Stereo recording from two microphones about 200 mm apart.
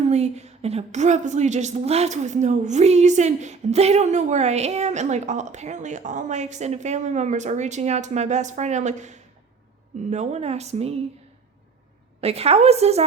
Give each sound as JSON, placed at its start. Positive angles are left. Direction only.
{"t": 0.0, "sound": "speech", "side_deg": -35}
{"t": 12.2, "sound": "speech", "side_deg": -30}